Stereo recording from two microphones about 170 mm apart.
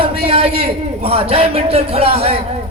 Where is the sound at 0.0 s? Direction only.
35° right (ahead or behind).